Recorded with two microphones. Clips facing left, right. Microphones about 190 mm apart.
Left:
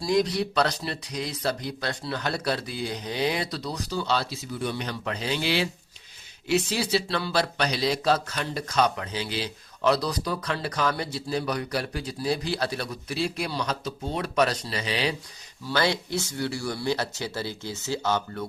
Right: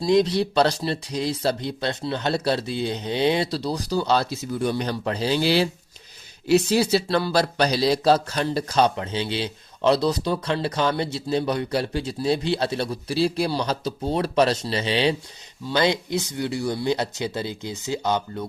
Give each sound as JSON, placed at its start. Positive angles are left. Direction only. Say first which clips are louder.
{"t": 0.0, "sound": "speech", "louder": "right 5 dB", "side_deg": -25}